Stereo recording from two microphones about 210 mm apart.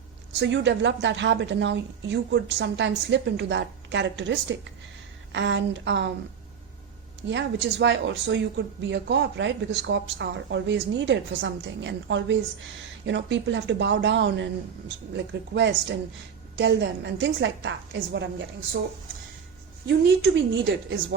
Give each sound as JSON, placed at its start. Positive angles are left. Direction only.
{"t": 0.3, "sound": "speech", "side_deg": -55}
{"t": 7.3, "sound": "speech", "side_deg": -60}
{"t": 19.9, "sound": "speech", "side_deg": -60}